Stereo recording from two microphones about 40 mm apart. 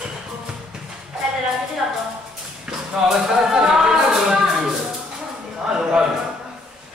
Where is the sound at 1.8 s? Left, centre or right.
Right.